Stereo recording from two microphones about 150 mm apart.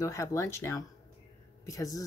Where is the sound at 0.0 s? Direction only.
20° left (ahead or behind).